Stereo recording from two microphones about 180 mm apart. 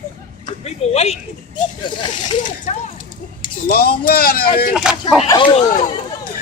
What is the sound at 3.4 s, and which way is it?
Speech, 55° left (ahead or behind).